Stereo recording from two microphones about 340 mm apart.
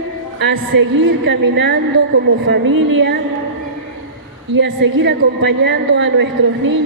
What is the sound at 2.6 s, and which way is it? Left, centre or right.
Speech, right.